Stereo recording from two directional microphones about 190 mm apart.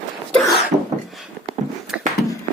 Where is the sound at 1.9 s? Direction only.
5° right (ahead or behind).